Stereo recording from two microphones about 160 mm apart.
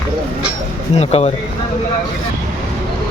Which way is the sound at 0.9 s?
40° left (ahead or behind).